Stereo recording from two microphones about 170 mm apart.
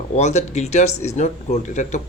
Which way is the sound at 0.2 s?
40° left (ahead or behind).